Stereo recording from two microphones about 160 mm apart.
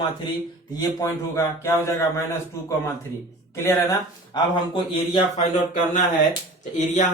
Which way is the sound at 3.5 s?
20° left (ahead or behind).